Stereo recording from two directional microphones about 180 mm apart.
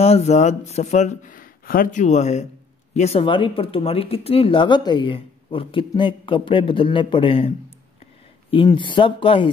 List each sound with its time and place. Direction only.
0.0 s speech: 35° left (ahead or behind)